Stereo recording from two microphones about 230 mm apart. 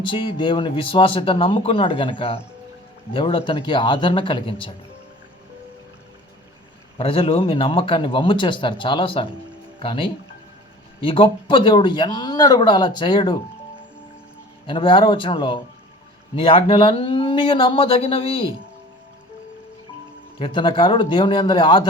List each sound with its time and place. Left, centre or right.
0.1 s speech: left
7.0 s speech: left
14.7 s speech: left
20.4 s speech: left